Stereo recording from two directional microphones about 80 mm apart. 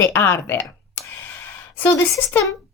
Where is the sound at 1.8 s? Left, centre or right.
Left.